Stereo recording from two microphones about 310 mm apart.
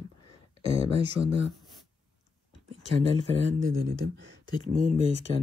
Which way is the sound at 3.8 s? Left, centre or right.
Right.